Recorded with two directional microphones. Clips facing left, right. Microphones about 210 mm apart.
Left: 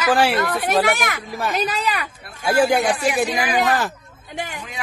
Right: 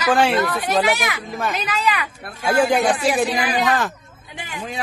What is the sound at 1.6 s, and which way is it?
Speech, 40° left (ahead or behind).